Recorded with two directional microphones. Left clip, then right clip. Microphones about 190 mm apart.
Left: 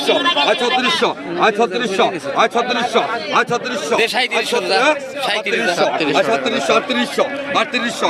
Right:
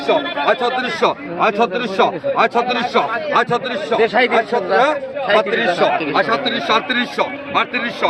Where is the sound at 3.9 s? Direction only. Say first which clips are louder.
Right 2 dB; 30° right (ahead or behind).